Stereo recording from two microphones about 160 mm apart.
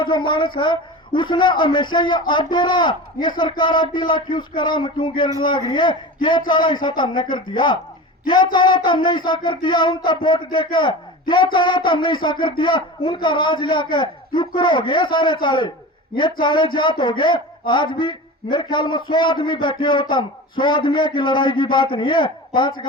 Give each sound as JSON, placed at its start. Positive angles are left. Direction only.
{"t": 0.0, "sound": "speech", "side_deg": 30}